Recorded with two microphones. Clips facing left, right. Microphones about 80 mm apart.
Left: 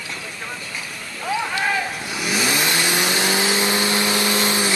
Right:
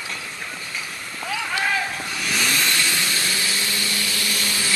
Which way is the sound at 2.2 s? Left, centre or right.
Centre.